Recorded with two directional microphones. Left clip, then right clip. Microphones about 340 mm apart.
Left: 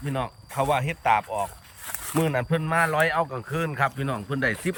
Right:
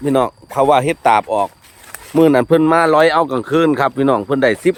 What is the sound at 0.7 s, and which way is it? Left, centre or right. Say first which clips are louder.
Speech: right 10 dB; centre.